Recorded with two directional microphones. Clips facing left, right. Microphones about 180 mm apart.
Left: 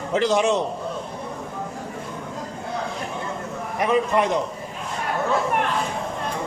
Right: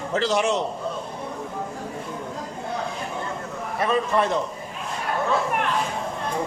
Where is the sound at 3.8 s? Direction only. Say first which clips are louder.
Left 2 dB; 15° left (ahead or behind).